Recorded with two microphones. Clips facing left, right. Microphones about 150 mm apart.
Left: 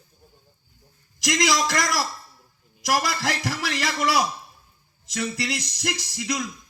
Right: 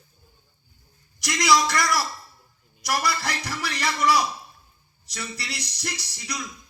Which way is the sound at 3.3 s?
45° left (ahead or behind).